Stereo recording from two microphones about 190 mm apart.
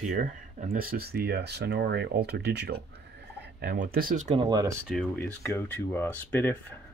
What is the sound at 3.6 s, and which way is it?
Speech, 50° right (ahead or behind).